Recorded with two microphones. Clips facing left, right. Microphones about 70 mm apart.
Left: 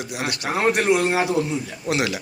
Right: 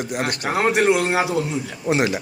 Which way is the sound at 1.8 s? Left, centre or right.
Right.